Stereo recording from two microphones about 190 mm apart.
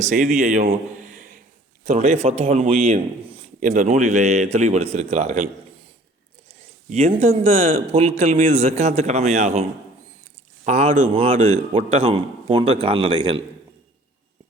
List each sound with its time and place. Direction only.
0.0 s a man's voice: 40° right (ahead or behind)
6.5 s speech: 35° right (ahead or behind)
10.7 s a man's voice: 35° right (ahead or behind)